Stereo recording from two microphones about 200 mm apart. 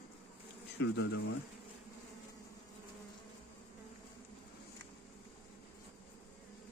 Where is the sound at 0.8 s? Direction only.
70° left (ahead or behind).